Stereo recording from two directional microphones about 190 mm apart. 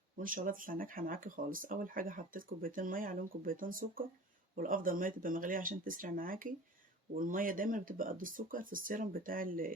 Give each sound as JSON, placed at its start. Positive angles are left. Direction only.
{"t": 0.2, "sound": "speech", "side_deg": -45}